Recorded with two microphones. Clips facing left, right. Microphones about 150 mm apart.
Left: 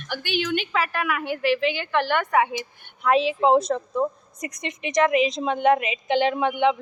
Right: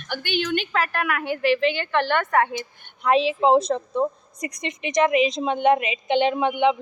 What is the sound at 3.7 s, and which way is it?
Speech, 25° right (ahead or behind).